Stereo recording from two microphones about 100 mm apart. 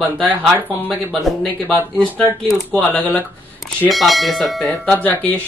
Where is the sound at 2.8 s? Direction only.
15° left (ahead or behind).